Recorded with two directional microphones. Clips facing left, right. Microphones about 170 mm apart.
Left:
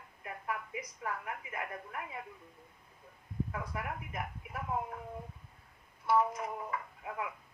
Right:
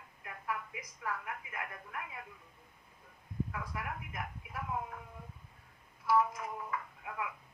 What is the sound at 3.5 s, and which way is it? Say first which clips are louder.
Speech: left 2 dB; 30° left (ahead or behind).